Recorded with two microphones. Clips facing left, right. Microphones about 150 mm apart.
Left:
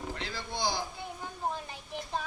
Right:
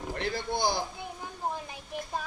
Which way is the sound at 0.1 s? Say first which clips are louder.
Right 6 dB; 55° right (ahead or behind).